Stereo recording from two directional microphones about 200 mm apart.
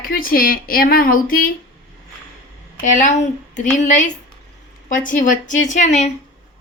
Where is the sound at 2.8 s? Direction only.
40° left (ahead or behind).